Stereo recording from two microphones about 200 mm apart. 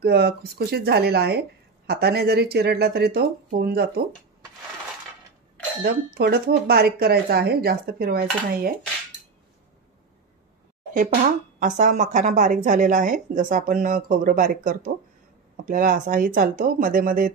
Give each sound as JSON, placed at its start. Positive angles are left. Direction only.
{"t": 0.0, "sound": "speech", "side_deg": -55}
{"t": 5.9, "sound": "speech", "side_deg": -50}
{"t": 11.6, "sound": "a woman's voice", "side_deg": -40}